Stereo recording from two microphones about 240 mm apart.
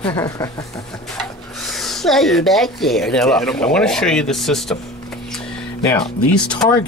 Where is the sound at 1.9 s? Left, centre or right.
Centre.